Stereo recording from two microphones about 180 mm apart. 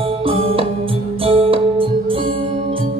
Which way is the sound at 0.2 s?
30° right (ahead or behind).